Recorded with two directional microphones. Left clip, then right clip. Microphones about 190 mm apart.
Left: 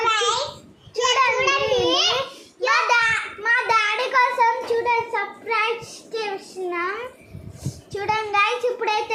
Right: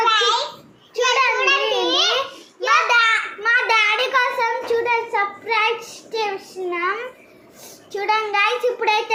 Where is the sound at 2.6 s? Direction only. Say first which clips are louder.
Right 3 dB; 5° left (ahead or behind).